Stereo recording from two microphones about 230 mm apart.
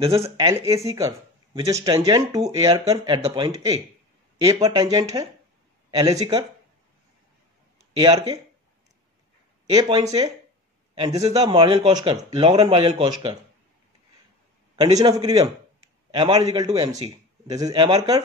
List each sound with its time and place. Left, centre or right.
0.2 s a man's voice: right
7.9 s speech: right
9.7 s a man's voice: centre
14.8 s a man's voice: centre